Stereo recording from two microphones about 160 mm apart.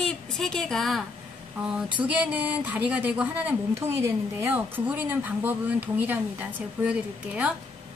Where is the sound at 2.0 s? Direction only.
10° right (ahead or behind).